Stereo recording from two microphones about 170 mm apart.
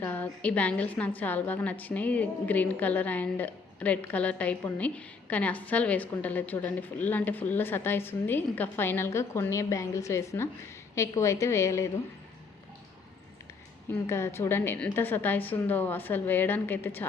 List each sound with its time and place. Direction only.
0.0 s a woman's voice: 10° left (ahead or behind)
13.9 s a woman's voice: 15° left (ahead or behind)